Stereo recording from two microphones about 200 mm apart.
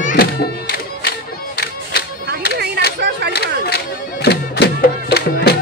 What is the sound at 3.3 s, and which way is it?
Music, 50° left (ahead or behind).